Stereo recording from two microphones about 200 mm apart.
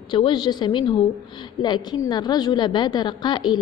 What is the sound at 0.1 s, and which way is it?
A woman's voice, 20° left (ahead or behind).